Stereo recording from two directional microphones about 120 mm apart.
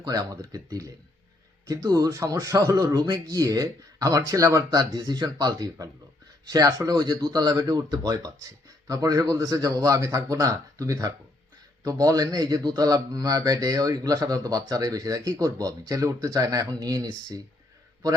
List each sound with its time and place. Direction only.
0.0 s a man's voice: 30° right (ahead or behind)